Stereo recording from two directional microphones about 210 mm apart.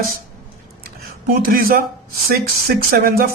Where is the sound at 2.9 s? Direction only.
45° right (ahead or behind).